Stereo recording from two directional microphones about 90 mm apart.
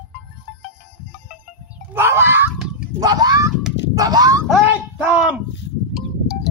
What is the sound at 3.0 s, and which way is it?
Speech, 45° right (ahead or behind).